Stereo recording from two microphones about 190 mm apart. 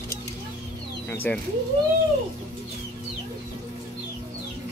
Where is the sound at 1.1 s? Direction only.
10° left (ahead or behind).